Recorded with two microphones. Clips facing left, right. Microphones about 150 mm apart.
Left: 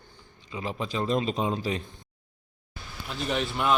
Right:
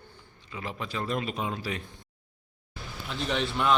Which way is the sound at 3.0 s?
5° left (ahead or behind).